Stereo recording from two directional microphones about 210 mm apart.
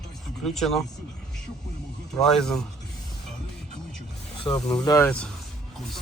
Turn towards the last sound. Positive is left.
turn(degrees=20)  # may be behind; listen again after turning